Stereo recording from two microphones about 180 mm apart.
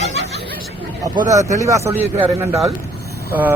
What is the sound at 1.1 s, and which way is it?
Speech, 20° right (ahead or behind).